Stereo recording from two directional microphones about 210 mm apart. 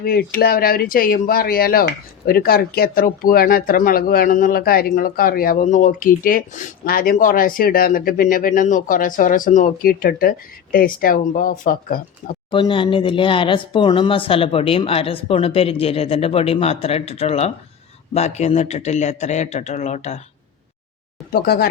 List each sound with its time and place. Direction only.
0.0 s speech: 45° left (ahead or behind)
12.5 s speech: 25° left (ahead or behind)
21.4 s speech: 50° left (ahead or behind)